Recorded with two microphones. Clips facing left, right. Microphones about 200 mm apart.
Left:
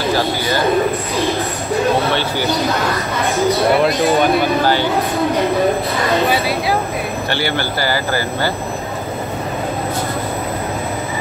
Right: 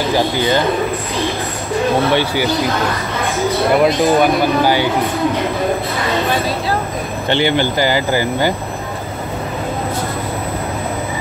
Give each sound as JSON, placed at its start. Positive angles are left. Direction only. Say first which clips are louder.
{"t": 0.0, "sound": "speech", "louder": "right 2 dB", "side_deg": -15}
{"t": 1.1, "sound": "speech", "louder": "left 2 dB", "side_deg": 15}
{"t": 2.1, "sound": "speech", "louder": "right 3 dB", "side_deg": -15}
{"t": 3.3, "sound": "speech", "louder": "left 2 dB", "side_deg": 15}
{"t": 3.8, "sound": "speech", "louder": "right 2 dB", "side_deg": 0}
{"t": 7.2, "sound": "speech", "louder": "right 8 dB", "side_deg": -20}